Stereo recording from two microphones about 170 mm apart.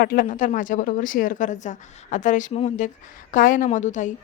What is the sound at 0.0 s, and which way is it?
Speech, 60° left (ahead or behind).